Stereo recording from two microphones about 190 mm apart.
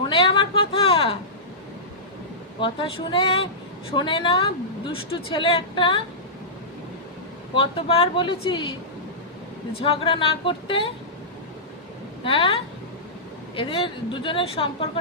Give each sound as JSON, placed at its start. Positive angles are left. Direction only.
{"t": 0.1, "sound": "a sound", "side_deg": 25}
{"t": 2.6, "sound": "a woman's voice", "side_deg": 25}
{"t": 7.5, "sound": "a woman's voice", "side_deg": 25}
{"t": 9.8, "sound": "a woman's voice", "side_deg": 25}
{"t": 12.2, "sound": "a woman's voice", "side_deg": 25}
{"t": 13.6, "sound": "a woman's voice", "side_deg": 25}